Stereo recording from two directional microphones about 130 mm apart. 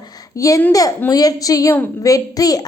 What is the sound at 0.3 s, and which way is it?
A woman's voice, 25° left (ahead or behind).